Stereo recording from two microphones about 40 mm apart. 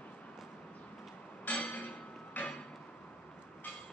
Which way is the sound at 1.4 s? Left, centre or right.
Left.